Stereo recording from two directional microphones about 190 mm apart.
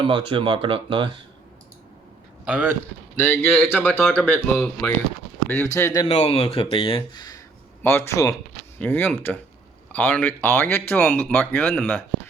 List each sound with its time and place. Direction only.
0.1 s speech: 25° right (ahead or behind)
2.4 s a man's voice: 5° right (ahead or behind)
3.2 s speech: 10° left (ahead or behind)
6.1 s speech: 35° left (ahead or behind); by 12.0 s centre (ahead or behind)